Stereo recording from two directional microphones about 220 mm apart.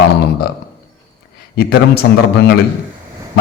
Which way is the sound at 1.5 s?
45° left (ahead or behind).